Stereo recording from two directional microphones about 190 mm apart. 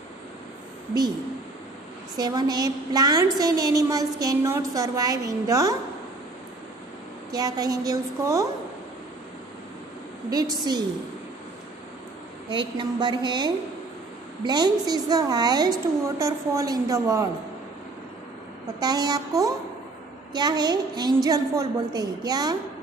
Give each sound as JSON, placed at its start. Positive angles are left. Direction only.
{"t": 2.1, "sound": "a woman's voice", "side_deg": -20}
{"t": 7.2, "sound": "a woman's voice", "side_deg": -20}
{"t": 10.3, "sound": "a woman's voice", "side_deg": -20}
{"t": 12.4, "sound": "a woman's voice", "side_deg": -25}
{"t": 18.8, "sound": "a woman's voice", "side_deg": -20}